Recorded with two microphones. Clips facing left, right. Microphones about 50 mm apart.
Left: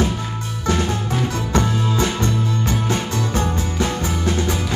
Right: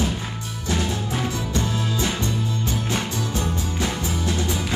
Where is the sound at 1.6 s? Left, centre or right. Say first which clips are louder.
Left 7 dB; left.